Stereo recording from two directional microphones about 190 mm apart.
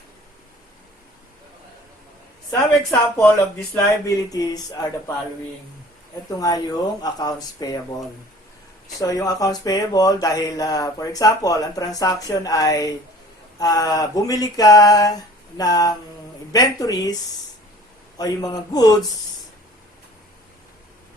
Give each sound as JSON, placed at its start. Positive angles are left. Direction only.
{"t": 2.5, "sound": "a woman's voice", "side_deg": 10}
{"t": 6.4, "sound": "speech", "side_deg": 20}
{"t": 9.0, "sound": "speech", "side_deg": 20}
{"t": 18.2, "sound": "speech", "side_deg": 20}